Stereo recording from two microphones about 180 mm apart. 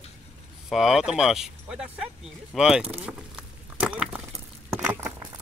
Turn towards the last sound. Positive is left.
turn(degrees=-15)  # may be behind; listen again after turning